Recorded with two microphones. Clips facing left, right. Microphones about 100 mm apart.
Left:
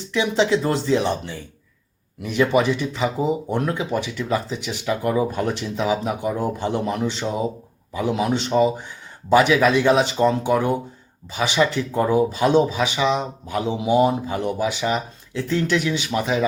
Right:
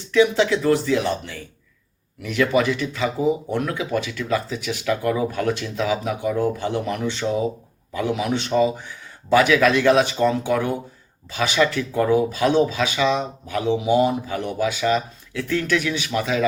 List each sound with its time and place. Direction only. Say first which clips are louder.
0.1 s speech: right 2 dB; 20° left (ahead or behind)
3.8 s speech: even; 15° left (ahead or behind)